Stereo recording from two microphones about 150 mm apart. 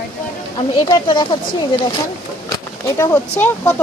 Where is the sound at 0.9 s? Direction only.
30° left (ahead or behind).